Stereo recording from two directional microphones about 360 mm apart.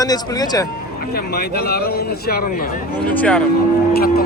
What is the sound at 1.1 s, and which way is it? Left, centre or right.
Speech, left.